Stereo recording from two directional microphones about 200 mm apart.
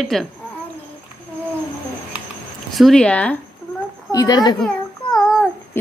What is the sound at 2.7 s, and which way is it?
Speech, centre (ahead or behind).